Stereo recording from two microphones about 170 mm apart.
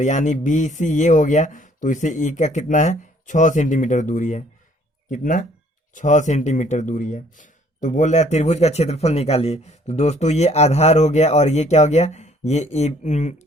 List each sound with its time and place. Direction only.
0.0 s speech: 45° left (ahead or behind)